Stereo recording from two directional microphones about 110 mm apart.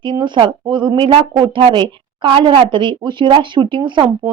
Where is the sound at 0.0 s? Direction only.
45° right (ahead or behind).